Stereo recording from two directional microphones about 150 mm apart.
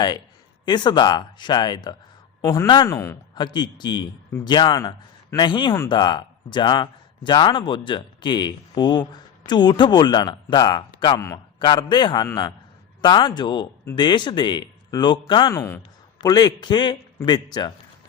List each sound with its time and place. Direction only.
0.6 s a man's voice: 30° left (ahead or behind)
2.6 s speech: 35° left (ahead or behind)
2.9 s speech: 20° left (ahead or behind)
15.5 s speech: 15° left (ahead or behind)
16.2 s speech: 25° left (ahead or behind)